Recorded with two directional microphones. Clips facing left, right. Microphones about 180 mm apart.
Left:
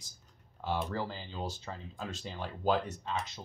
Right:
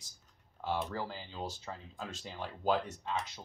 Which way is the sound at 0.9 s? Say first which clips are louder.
Left 3 dB; 10° right (ahead or behind).